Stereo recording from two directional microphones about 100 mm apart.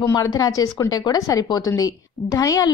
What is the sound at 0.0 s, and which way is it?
A woman's voice, 35° left (ahead or behind).